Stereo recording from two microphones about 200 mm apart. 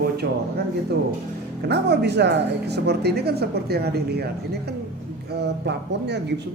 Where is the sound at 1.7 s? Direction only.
55° right (ahead or behind).